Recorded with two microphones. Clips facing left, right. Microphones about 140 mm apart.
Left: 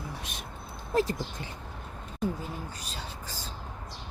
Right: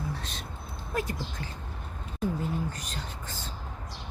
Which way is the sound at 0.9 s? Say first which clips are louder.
Left 5 dB; 30° left (ahead or behind).